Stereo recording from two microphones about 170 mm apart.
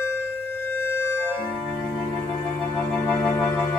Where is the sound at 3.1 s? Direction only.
10° left (ahead or behind).